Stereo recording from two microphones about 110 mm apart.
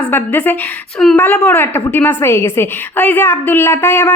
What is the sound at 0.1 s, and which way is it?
A woman's voice, 15° left (ahead or behind).